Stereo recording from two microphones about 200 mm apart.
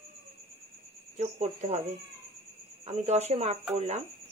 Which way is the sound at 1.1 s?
35° right (ahead or behind).